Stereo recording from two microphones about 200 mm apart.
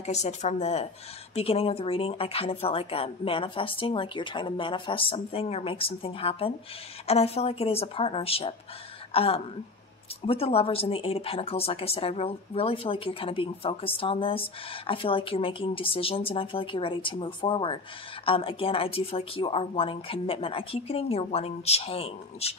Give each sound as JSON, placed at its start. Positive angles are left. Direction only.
{"t": 0.0, "sound": "a woman's voice", "side_deg": 35}